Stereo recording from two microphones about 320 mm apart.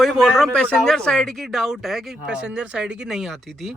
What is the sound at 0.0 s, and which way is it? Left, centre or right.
Speech, centre.